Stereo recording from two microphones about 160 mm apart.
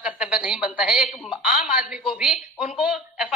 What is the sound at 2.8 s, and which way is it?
Speech, 5° right (ahead or behind).